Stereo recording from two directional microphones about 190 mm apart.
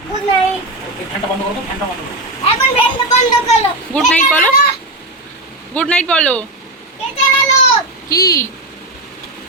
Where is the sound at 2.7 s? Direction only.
35° left (ahead or behind).